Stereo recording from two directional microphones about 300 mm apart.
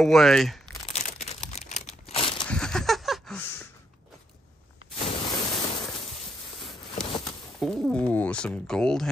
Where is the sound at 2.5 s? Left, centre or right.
Centre.